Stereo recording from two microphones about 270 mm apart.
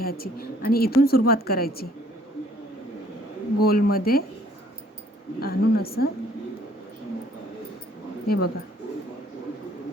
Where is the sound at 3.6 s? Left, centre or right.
Left.